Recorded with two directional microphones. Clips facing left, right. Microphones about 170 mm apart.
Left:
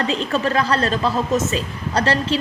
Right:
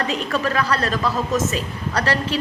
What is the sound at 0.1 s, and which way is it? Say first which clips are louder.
A woman's voice: left 2 dB; 30° left (ahead or behind).